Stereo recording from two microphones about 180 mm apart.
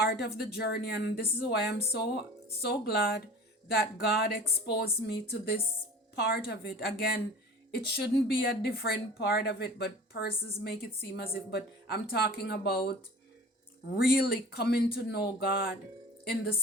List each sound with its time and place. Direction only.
0.0 s speech: 65° left (ahead or behind)
6.1 s speech: 65° left (ahead or behind)